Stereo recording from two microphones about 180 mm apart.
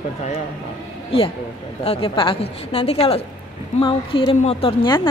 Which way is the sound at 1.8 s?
30° left (ahead or behind).